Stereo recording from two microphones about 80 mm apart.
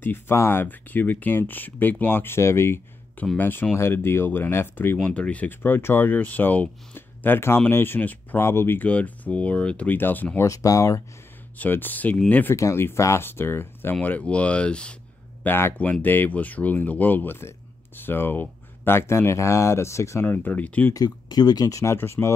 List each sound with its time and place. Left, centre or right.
0.0 s speech: left
4.9 s speech: centre; by 8.8 s left
8.8 s speech: centre
10.4 s speech: left
11.5 s speech: left
12.5 s speech: left
14.0 s speech: centre
15.4 s speech: left
20.2 s speech: left
20.9 s speech: left